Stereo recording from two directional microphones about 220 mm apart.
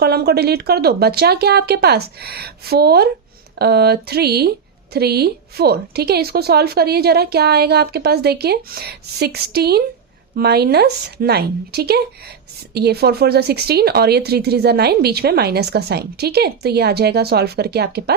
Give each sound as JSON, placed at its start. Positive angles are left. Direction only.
{"t": 0.0, "sound": "speech", "side_deg": -45}